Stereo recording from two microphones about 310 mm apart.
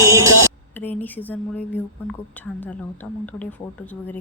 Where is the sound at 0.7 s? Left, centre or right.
Centre.